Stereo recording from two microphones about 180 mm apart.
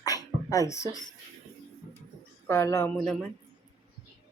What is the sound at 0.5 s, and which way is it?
Speech, 15° left (ahead or behind).